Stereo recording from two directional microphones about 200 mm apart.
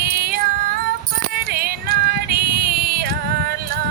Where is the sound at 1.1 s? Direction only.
50° right (ahead or behind).